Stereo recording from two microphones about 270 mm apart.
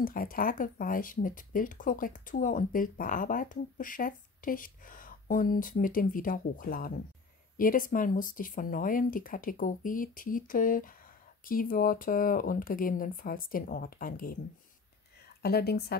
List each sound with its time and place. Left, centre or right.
0.0 s speech: left
15.4 s speech: left